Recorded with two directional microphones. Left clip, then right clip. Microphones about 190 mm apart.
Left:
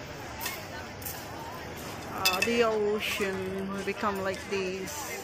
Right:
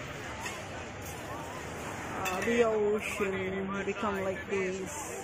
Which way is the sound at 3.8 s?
5° left (ahead or behind).